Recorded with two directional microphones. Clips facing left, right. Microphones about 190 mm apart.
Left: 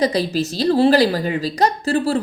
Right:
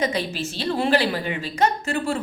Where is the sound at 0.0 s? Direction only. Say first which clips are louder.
Left 6 dB; 35° left (ahead or behind).